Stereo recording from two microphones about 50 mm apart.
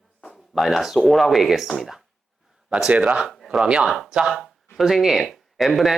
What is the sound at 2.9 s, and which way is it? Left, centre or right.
Speech, right.